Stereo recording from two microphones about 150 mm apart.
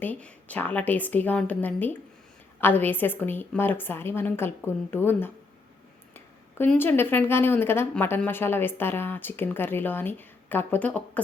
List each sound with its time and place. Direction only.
0.0 s speech: 10° left (ahead or behind)